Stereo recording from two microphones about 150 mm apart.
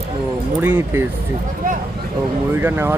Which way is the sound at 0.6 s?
15° right (ahead or behind).